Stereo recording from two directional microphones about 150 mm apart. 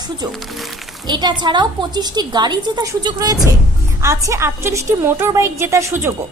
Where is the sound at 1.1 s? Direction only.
30° right (ahead or behind).